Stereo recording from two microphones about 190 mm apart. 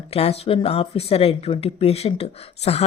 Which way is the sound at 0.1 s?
30° left (ahead or behind).